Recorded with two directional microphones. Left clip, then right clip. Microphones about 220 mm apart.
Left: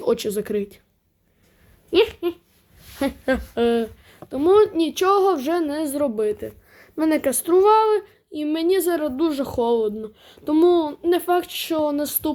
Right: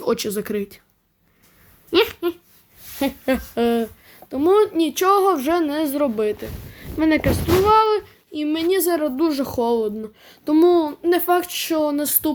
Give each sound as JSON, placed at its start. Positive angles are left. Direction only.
{"t": 0.0, "sound": "a child's voice", "side_deg": -20}
{"t": 1.9, "sound": "speech", "side_deg": -25}
{"t": 3.0, "sound": "a woman's voice", "side_deg": -15}